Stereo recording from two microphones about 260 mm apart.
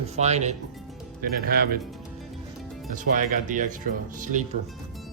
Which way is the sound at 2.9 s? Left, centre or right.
Right.